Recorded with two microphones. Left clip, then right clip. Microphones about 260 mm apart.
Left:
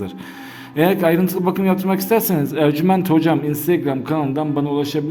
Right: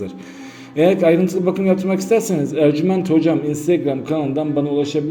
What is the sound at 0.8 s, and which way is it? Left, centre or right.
Speech, centre.